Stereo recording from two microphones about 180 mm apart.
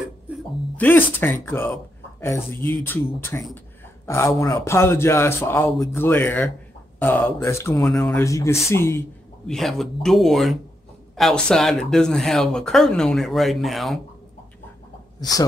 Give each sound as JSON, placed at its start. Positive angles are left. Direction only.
{"t": 0.7, "sound": "a man's voice", "side_deg": 10}
{"t": 7.8, "sound": "speech", "side_deg": 0}
{"t": 8.2, "sound": "a man's voice", "side_deg": 15}
{"t": 9.5, "sound": "speech", "side_deg": 0}
{"t": 15.1, "sound": "a woman's voice", "side_deg": 20}